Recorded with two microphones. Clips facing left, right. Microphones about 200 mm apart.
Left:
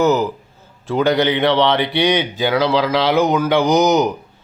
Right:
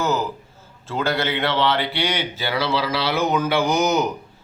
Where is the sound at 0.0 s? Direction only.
20° left (ahead or behind).